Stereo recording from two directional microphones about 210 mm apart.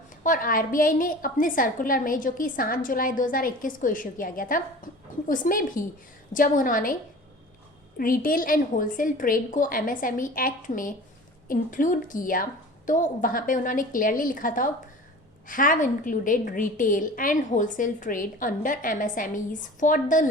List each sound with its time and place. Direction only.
0.2 s a woman's voice: 40° left (ahead or behind)
7.9 s a woman's voice: 40° left (ahead or behind)